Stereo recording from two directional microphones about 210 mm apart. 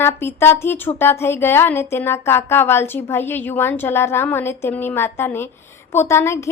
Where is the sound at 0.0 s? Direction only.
10° left (ahead or behind).